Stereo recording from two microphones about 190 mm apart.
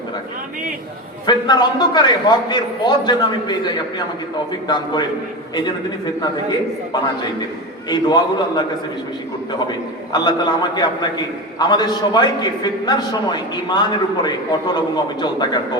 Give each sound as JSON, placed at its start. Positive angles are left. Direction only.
{"t": 1.3, "sound": "a man's voice", "side_deg": 20}
{"t": 7.9, "sound": "a man's voice", "side_deg": 20}
{"t": 10.1, "sound": "a man's voice", "side_deg": 20}